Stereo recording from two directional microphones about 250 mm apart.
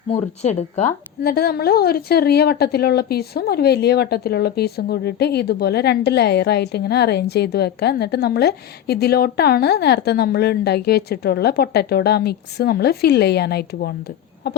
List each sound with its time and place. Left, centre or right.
0.1 s a woman's voice: left